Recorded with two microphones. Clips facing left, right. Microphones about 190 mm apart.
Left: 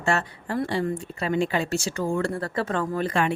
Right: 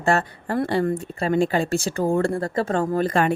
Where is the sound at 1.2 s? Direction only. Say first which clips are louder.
Right 4 dB; 40° right (ahead or behind).